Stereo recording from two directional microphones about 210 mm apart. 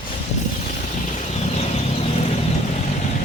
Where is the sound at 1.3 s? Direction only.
30° left (ahead or behind).